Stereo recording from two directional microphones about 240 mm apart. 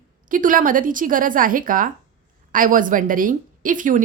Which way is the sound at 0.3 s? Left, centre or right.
Right.